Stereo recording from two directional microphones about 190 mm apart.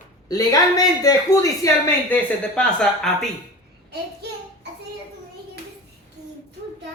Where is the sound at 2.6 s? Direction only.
Centre (ahead or behind).